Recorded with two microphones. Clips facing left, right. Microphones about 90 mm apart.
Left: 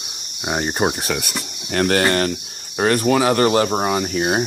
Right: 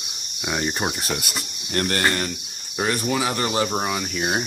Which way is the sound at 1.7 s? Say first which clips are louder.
Left 5 dB; 90° left.